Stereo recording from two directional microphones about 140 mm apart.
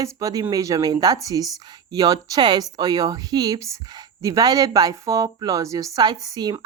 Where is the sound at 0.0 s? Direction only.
25° right (ahead or behind).